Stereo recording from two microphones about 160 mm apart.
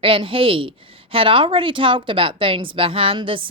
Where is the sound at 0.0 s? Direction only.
35° right (ahead or behind).